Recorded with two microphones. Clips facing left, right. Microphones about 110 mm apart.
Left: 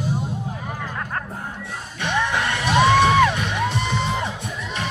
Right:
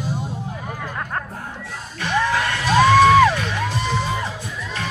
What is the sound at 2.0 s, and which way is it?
Music, 20° left (ahead or behind).